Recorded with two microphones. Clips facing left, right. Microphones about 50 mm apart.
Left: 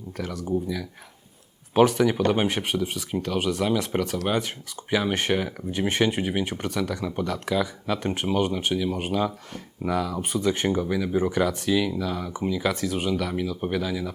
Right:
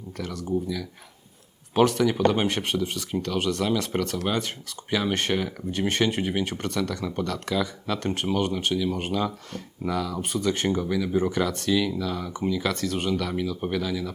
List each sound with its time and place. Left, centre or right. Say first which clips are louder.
0.4 s speech: even; centre